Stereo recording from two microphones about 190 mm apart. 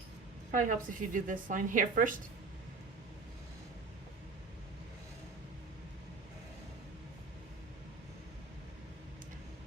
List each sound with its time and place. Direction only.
0.5 s a woman's voice: 45° right (ahead or behind)